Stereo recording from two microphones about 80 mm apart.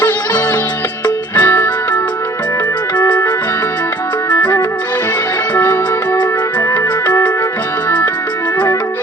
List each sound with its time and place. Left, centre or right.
1.0 s music: left
7.9 s music: left